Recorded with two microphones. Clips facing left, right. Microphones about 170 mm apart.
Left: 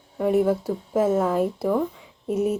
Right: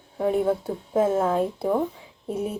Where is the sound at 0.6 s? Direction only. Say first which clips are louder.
Even; 5° left (ahead or behind).